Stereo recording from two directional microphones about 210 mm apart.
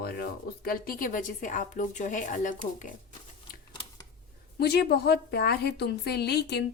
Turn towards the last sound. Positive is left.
turn(degrees=50)  # may be behind; listen again after turning